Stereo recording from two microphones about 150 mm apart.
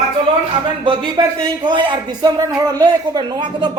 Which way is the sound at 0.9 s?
35° right (ahead or behind).